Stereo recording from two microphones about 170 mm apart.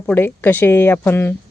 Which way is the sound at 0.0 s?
10° left (ahead or behind).